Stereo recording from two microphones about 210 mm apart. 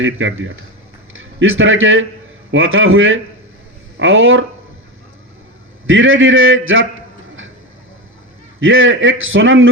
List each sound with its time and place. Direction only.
0.0 s a man's voice: 65° right (ahead or behind)
5.8 s a man's voice: 70° right (ahead or behind)
8.6 s a man's voice: 70° right (ahead or behind)